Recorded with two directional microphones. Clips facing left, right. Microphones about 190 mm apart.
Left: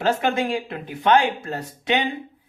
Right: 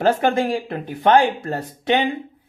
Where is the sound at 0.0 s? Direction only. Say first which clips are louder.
Right 4 dB; 45° right (ahead or behind).